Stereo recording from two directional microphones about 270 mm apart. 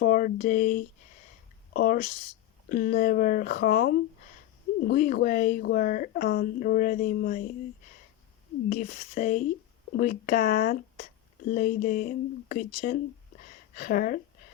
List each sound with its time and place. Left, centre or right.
0.0 s speech: left
8.7 s speech: left